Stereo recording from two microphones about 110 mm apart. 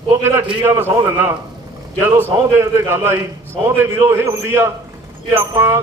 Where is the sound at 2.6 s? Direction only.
25° right (ahead or behind).